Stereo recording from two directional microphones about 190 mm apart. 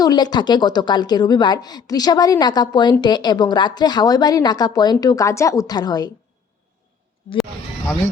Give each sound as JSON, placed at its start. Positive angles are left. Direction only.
{"t": 0.0, "sound": "a woman's voice", "side_deg": 20}